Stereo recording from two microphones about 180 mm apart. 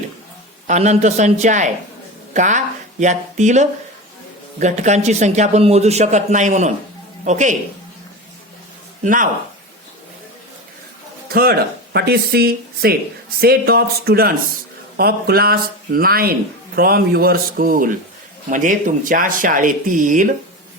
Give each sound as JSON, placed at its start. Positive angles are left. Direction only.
{"t": 0.7, "sound": "a man's voice", "side_deg": -40}
{"t": 9.0, "sound": "speech", "side_deg": -45}
{"t": 11.9, "sound": "speech", "side_deg": -65}